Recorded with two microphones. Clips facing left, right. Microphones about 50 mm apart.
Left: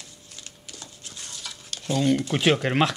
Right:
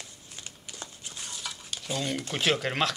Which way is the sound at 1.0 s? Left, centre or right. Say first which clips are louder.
Even; centre.